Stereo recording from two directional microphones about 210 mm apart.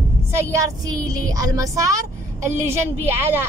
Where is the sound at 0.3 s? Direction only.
15° right (ahead or behind).